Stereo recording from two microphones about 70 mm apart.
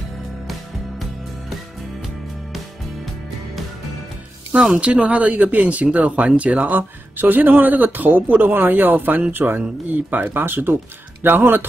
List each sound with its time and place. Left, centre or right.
4.6 s speech: centre